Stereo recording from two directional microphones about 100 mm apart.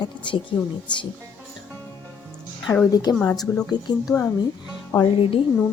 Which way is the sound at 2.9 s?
40° left (ahead or behind).